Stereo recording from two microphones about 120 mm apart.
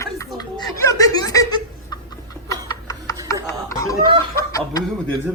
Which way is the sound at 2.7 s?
30° left (ahead or behind).